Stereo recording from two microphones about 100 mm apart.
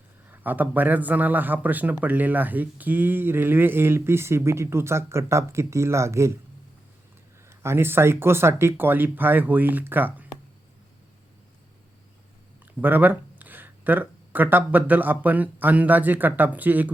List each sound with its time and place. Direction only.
0.3 s a man's voice: 15° right (ahead or behind)
7.6 s a man's voice: 25° right (ahead or behind)
12.8 s speech: 20° right (ahead or behind)